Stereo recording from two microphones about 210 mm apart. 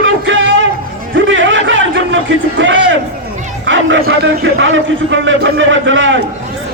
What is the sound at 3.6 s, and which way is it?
A man's voice, 65° right (ahead or behind).